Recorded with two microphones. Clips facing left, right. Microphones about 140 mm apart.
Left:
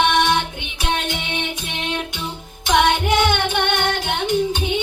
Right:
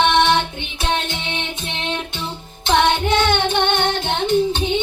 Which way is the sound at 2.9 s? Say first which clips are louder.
Even; 15° left (ahead or behind).